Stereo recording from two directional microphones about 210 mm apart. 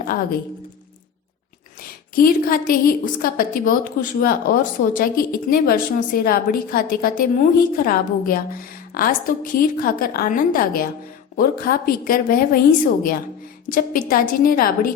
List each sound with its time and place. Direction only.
0.0 s a woman's voice: 40° left (ahead or behind)
1.8 s a woman's voice: 45° left (ahead or behind)